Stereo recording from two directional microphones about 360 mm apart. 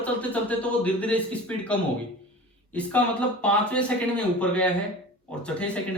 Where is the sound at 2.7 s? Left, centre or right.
Centre.